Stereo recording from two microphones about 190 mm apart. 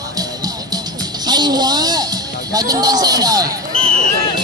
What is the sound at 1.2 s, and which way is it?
Speech, 20° right (ahead or behind).